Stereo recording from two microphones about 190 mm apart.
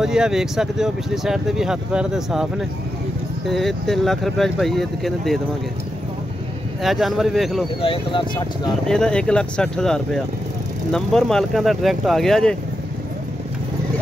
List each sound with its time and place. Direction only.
0.0 s speech: 5° right (ahead or behind)
3.4 s speech: centre (ahead or behind)
6.8 s speech: centre (ahead or behind)
7.8 s speech: 25° left (ahead or behind)
8.8 s speech: 5° left (ahead or behind)